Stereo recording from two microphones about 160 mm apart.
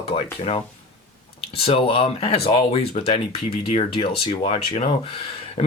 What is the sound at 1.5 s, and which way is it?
Speech, 35° left (ahead or behind).